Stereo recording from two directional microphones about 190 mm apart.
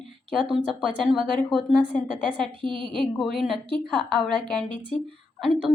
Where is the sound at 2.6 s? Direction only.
25° right (ahead or behind).